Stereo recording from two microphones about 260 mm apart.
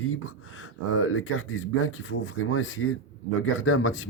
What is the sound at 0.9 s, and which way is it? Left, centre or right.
Speech, left.